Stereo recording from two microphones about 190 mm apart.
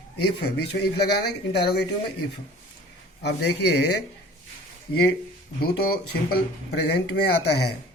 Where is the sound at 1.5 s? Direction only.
60° left (ahead or behind).